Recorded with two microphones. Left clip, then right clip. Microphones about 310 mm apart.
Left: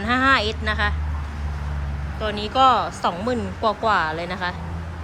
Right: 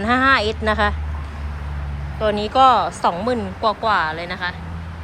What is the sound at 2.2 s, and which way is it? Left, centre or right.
A woman's voice, centre.